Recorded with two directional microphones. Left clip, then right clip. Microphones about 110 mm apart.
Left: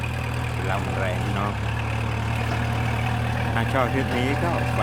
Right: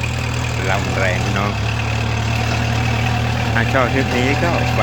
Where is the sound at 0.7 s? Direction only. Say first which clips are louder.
Right 8 dB; 15° right (ahead or behind).